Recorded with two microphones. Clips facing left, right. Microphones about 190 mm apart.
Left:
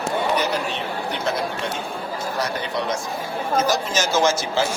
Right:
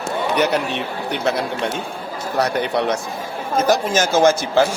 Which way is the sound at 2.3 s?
65° right (ahead or behind).